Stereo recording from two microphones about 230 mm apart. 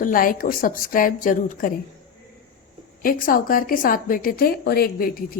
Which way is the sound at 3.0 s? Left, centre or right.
Left.